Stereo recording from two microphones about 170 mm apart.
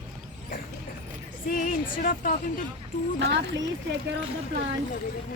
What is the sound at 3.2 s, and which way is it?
Speech, 90° right.